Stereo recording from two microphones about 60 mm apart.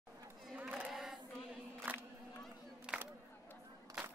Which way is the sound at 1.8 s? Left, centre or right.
Right.